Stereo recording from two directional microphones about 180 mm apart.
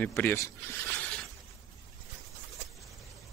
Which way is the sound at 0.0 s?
10° left (ahead or behind).